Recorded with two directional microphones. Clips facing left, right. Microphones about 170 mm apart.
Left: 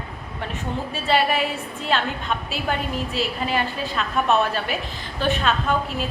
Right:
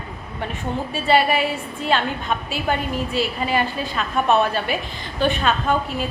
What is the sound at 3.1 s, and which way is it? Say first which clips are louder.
A woman's voice: right 3 dB; centre (ahead or behind).